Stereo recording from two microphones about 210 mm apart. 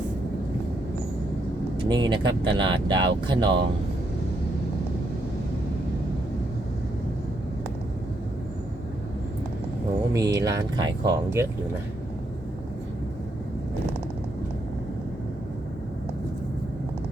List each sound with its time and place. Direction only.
1.9 s speech: 20° right (ahead or behind)
10.1 s speech: 15° right (ahead or behind)